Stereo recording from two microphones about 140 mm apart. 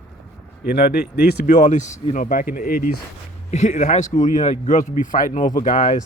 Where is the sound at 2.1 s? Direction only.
75° left (ahead or behind).